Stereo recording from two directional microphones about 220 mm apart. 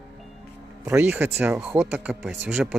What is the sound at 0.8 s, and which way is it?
Speech, 10° right (ahead or behind).